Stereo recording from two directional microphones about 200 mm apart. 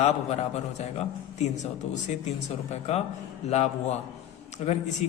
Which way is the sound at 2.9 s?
35° left (ahead or behind).